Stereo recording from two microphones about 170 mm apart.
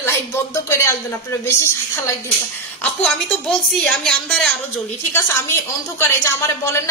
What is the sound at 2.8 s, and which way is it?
A woman's voice, 5° left (ahead or behind).